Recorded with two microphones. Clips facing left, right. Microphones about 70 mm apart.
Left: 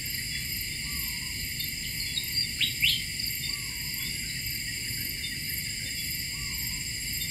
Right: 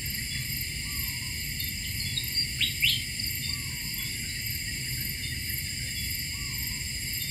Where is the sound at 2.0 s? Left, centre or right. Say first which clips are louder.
Right 1 dB; centre.